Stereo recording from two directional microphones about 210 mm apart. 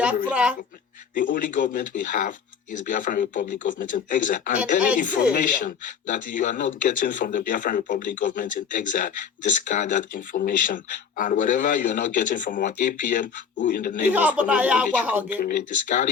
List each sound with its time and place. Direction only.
0.3 s a woman's voice: 5° right (ahead or behind)
1.1 s a man's voice: 40° left (ahead or behind)
14.1 s speech: 5° right (ahead or behind)
15.4 s speech: 45° left (ahead or behind)